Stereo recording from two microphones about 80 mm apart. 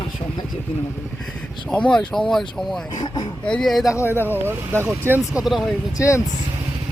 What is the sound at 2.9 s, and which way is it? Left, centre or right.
Speech, left.